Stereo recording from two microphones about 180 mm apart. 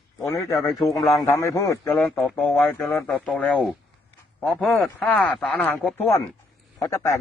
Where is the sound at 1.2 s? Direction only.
15° left (ahead or behind).